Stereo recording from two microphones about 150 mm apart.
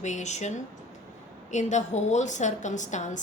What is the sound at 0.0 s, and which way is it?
A woman's voice, 50° left (ahead or behind).